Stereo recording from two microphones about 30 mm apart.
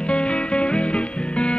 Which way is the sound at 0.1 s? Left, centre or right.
Left.